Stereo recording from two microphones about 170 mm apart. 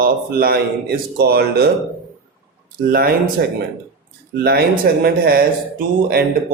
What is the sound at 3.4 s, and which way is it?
Speech, 75° right (ahead or behind).